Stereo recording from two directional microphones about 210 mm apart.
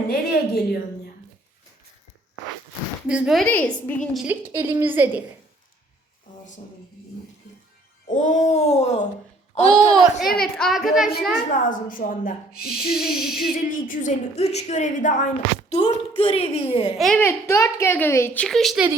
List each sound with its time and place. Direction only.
0.1 s a sound: 50° left (ahead or behind)
3.1 s a woman's voice: 5° right (ahead or behind)
8.0 s a woman's voice: 35° left (ahead or behind)
9.9 s a woman's voice: centre (ahead or behind)
11.5 s a woman's voice: 40° left (ahead or behind)
17.0 s a child's voice: 5° left (ahead or behind)